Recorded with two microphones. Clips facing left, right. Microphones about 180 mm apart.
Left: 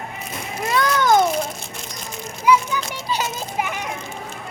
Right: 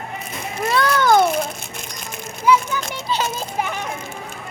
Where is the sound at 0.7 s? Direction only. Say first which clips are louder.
Right 1 dB; 15° left (ahead or behind).